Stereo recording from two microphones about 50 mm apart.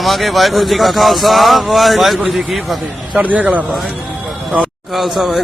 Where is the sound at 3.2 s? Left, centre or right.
Right.